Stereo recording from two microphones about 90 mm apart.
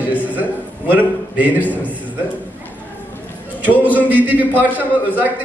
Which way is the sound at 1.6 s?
20° left (ahead or behind).